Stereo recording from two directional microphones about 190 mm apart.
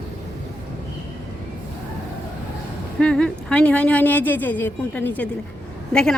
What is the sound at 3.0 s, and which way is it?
A woman's voice, 5° left (ahead or behind).